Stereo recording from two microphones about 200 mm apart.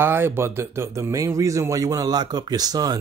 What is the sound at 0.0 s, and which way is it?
A man's voice, 10° right (ahead or behind).